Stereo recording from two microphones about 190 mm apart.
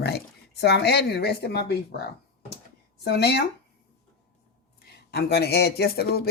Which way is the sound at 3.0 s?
55° left (ahead or behind).